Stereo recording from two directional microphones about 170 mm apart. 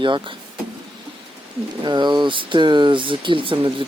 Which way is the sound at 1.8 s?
25° right (ahead or behind).